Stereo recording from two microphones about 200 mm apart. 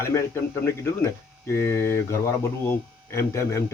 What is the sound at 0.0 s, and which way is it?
Speech, 15° left (ahead or behind).